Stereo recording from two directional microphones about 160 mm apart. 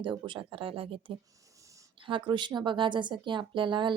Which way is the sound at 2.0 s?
30° right (ahead or behind).